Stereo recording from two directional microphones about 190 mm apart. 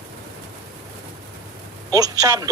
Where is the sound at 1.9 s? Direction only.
20° right (ahead or behind).